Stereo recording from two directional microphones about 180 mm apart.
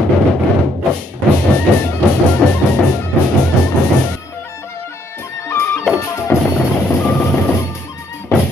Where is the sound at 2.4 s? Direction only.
5° left (ahead or behind).